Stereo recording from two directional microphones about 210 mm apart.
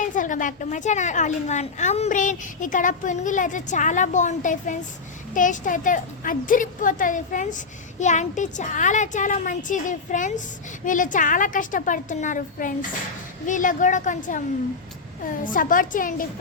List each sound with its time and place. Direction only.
0.0 s speech: 40° left (ahead or behind)
15.5 s speech: 40° left (ahead or behind)